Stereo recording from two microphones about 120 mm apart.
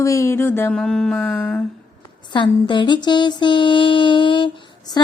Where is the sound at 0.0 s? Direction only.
25° left (ahead or behind).